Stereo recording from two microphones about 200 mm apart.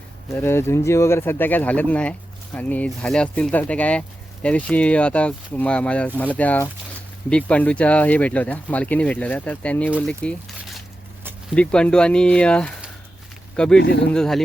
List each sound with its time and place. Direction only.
0.3 s speech: 10° left (ahead or behind)
10.1 s a sound: centre (ahead or behind)
11.5 s speech: 5° left (ahead or behind)
13.7 s speech: 60° left (ahead or behind)
14.1 s speech: centre (ahead or behind)